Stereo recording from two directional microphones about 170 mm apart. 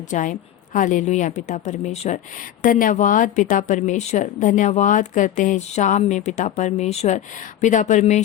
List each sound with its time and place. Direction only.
0.1 s a woman's voice: 50° left (ahead or behind)